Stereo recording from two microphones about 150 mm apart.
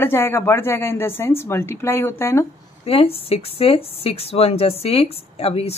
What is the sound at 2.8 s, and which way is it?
Speech, 40° left (ahead or behind).